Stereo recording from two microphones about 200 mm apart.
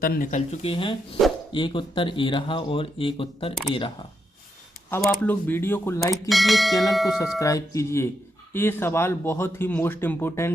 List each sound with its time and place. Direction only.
0.0 s speech: 45° left (ahead or behind); by 3.5 s 25° left (ahead or behind)
4.9 s speech: 5° left (ahead or behind)
6.2 s speech: centre (ahead or behind)
7.3 s speech: 15° left (ahead or behind)